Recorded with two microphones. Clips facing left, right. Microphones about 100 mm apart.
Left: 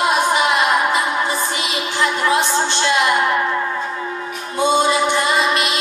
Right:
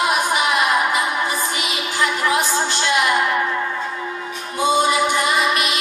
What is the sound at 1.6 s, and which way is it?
Music, 30° left (ahead or behind).